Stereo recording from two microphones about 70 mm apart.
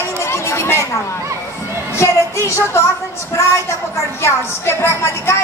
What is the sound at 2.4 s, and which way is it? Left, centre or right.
Speech, left.